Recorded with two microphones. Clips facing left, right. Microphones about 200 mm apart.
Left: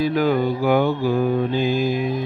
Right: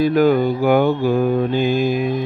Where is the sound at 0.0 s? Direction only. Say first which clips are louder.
Right 4 dB; 50° right (ahead or behind).